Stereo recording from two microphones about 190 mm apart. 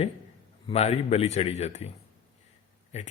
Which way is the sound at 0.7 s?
35° left (ahead or behind).